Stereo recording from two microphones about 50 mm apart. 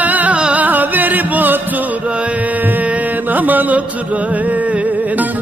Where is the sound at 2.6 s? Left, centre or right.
Right.